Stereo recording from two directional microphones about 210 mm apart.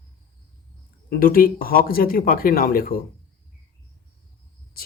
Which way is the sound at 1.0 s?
45° left (ahead or behind).